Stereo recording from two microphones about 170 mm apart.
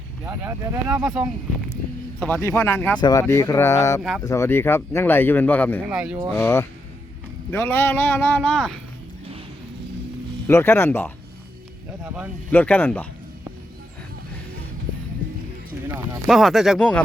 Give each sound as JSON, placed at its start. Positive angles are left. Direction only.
{"t": 0.3, "sound": "speech", "side_deg": -10}
{"t": 2.1, "sound": "speech", "side_deg": 10}
{"t": 5.8, "sound": "speech", "side_deg": -5}
{"t": 6.3, "sound": "speech", "side_deg": 15}
{"t": 10.4, "sound": "speech", "side_deg": 15}
{"t": 12.0, "sound": "speech", "side_deg": -10}
{"t": 12.5, "sound": "speech", "side_deg": 10}
{"t": 16.2, "sound": "speech", "side_deg": 0}